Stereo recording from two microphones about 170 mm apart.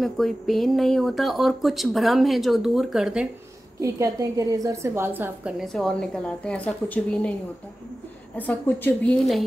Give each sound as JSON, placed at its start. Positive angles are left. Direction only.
{"t": 0.0, "sound": "speech", "side_deg": 0}
{"t": 3.8, "sound": "a woman's voice", "side_deg": -20}
{"t": 5.6, "sound": "speech", "side_deg": 0}
{"t": 8.4, "sound": "a woman's voice", "side_deg": 10}